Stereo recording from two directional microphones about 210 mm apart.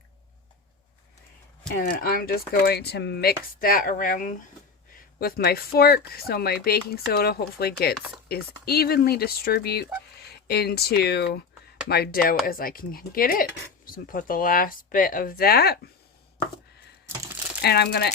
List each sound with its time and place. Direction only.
1.6 s speech: 45° left (ahead or behind)
17.6 s speech: 50° left (ahead or behind)